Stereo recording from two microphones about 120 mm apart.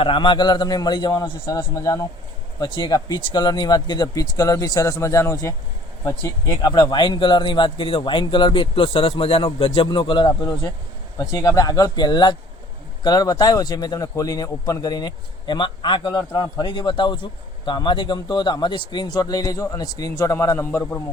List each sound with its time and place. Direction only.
0.0 s speech: 45° left (ahead or behind); by 2.0 s 25° left (ahead or behind)
2.6 s speech: 40° left (ahead or behind); by 20.7 s 25° left (ahead or behind)
20.7 s a man's voice: 15° left (ahead or behind)